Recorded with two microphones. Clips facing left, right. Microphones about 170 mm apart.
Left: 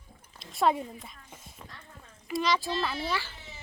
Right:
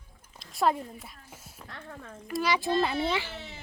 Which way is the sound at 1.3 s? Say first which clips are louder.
Even; 5° right (ahead or behind).